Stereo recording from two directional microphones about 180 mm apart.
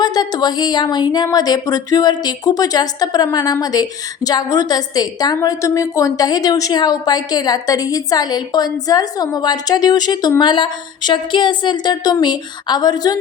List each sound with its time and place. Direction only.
0.0 s a woman's voice: 20° left (ahead or behind)